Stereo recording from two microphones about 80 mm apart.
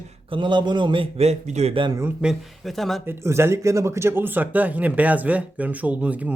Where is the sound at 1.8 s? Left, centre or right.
Right.